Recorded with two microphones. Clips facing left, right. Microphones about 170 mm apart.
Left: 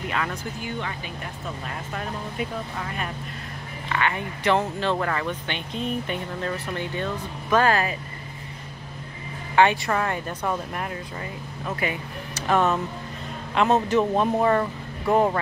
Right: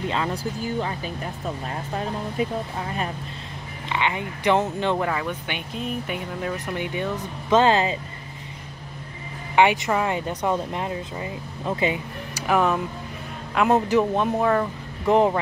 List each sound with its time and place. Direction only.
0.1 s speech: 30° right (ahead or behind)
3.9 s speech: 15° right (ahead or behind)
9.6 s speech: 15° right (ahead or behind)
12.4 s speech: 10° right (ahead or behind)
14.1 s speech: centre (ahead or behind)
15.0 s speech: 20° right (ahead or behind)